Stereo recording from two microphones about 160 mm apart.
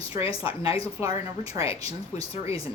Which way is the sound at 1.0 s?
20° right (ahead or behind).